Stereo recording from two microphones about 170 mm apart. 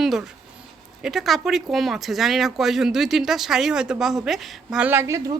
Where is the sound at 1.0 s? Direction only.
Centre (ahead or behind).